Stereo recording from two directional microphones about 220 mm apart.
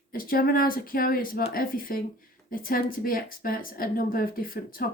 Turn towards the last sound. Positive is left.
turn(degrees=40)  # may be behind; listen again after turning